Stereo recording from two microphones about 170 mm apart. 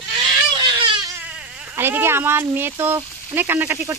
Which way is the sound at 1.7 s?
15° right (ahead or behind).